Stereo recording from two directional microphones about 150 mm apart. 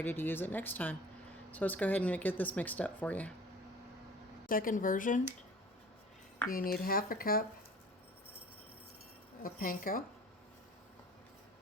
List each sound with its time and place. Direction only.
0.0 s speech: 15° left (ahead or behind)
4.4 s speech: 65° left (ahead or behind)
6.5 s speech: 75° left (ahead or behind)
9.4 s speech: 70° left (ahead or behind)